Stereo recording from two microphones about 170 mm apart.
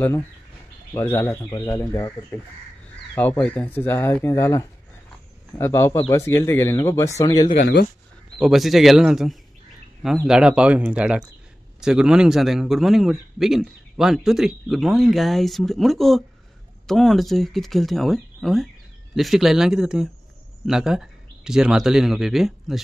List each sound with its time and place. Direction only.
0.9 s speech: 15° left (ahead or behind)
8.4 s a man's voice: centre (ahead or behind)